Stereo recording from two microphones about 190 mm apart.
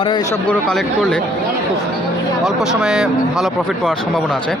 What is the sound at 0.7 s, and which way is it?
Speech, centre (ahead or behind).